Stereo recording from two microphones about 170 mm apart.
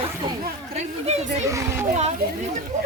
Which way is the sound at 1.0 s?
40° right (ahead or behind).